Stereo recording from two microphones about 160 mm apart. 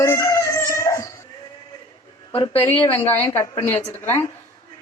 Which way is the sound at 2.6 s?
15° left (ahead or behind).